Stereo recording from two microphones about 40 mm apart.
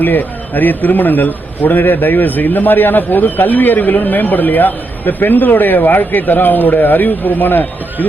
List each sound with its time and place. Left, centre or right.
0.0 s a man's voice: left